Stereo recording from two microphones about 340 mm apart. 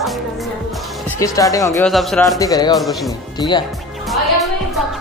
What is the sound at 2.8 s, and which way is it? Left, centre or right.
Speech, centre.